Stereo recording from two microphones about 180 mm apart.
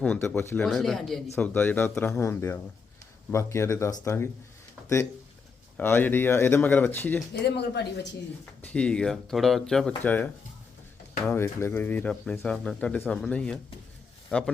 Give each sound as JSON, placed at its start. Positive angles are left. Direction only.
{"t": 0.0, "sound": "speech", "side_deg": 10}
{"t": 5.7, "sound": "speech", "side_deg": 10}
{"t": 7.4, "sound": "speech", "side_deg": 70}
{"t": 8.6, "sound": "speech", "side_deg": 5}
{"t": 11.3, "sound": "a man's voice", "side_deg": 10}